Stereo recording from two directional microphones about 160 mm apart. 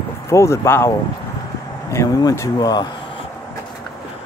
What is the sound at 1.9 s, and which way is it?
Speech, 20° left (ahead or behind).